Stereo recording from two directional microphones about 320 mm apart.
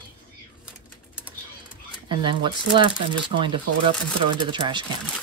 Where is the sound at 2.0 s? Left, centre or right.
Centre.